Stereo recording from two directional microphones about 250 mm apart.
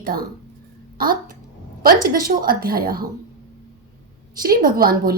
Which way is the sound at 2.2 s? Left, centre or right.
Right.